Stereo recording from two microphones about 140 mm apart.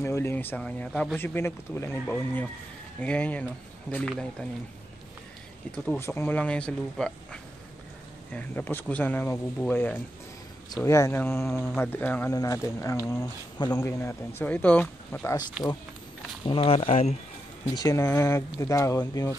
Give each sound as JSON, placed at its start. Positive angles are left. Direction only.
{"t": 0.0, "sound": "speech", "side_deg": 15}
{"t": 5.9, "sound": "speech", "side_deg": 15}
{"t": 8.3, "sound": "speech", "side_deg": 10}
{"t": 11.5, "sound": "speech", "side_deg": 5}
{"t": 15.6, "sound": "speech", "side_deg": -10}
{"t": 16.4, "sound": "speech", "side_deg": 40}
{"t": 17.6, "sound": "speech", "side_deg": 25}